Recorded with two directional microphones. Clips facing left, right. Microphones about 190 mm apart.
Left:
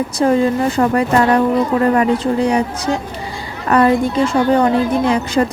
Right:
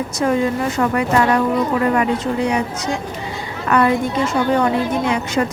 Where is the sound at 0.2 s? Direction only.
35° left (ahead or behind).